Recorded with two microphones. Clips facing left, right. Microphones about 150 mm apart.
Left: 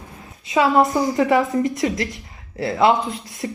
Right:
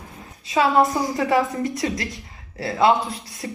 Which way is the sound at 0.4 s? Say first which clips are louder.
Left 2 dB; 20° left (ahead or behind).